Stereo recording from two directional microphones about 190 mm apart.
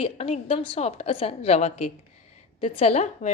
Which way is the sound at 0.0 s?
35° left (ahead or behind).